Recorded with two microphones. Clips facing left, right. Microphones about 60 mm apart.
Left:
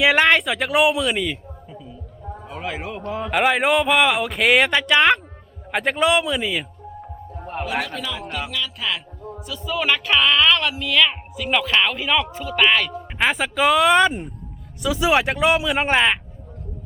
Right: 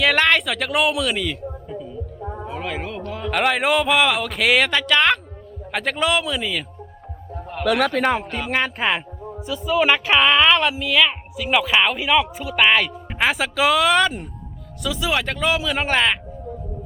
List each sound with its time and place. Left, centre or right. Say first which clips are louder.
0.0 s a man's voice: left 2 dB; centre
2.2 s a sound: right 4 dB; right
2.5 s speech: even; centre
3.0 s speech: left 1 dB; left
3.3 s speech: left 1 dB; centre
7.6 s a man's voice: right 8 dB; right
8.2 s speech: right 5 dB; right
9.2 s speech: right 4 dB; centre
10.8 s speech: right 1 dB; centre
14.8 s speech: left 4 dB; left